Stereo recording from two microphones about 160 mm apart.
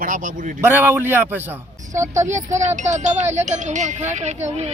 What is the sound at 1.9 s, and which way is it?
Speech, 50° right (ahead or behind).